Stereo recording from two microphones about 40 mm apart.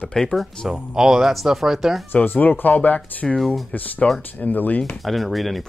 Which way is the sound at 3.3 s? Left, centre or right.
Centre.